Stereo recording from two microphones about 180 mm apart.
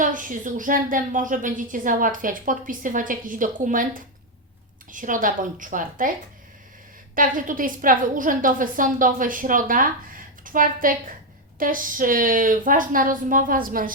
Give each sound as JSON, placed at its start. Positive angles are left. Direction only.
{"t": 0.0, "sound": "a woman's voice", "side_deg": -45}
{"t": 7.2, "sound": "a woman's voice", "side_deg": -50}